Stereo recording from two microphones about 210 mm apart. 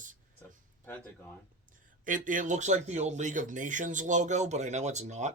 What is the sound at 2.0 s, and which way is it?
Speech, 40° right (ahead or behind).